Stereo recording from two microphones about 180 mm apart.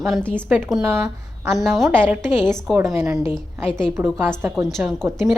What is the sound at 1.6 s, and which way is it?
Speech, centre (ahead or behind).